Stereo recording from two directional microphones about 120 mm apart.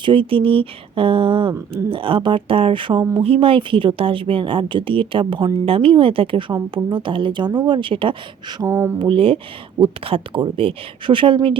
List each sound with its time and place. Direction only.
0.0 s a woman's voice: 45° right (ahead or behind)
5.6 s a woman's voice: 50° right (ahead or behind)
8.6 s speech: 20° right (ahead or behind)
9.0 s a woman's voice: 45° right (ahead or behind)